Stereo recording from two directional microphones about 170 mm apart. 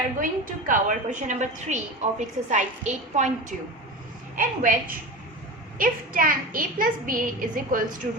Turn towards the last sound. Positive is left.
turn(degrees=-55)  # may be behind; listen again after turning